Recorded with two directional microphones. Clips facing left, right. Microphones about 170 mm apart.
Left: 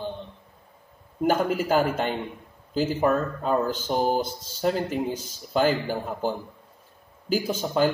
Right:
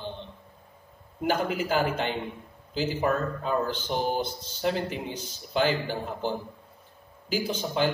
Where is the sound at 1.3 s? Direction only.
45° left (ahead or behind).